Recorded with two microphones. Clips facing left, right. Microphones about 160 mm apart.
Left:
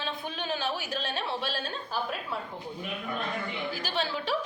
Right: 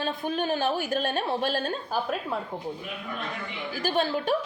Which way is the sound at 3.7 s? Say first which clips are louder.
Right 10 dB; 50° right (ahead or behind).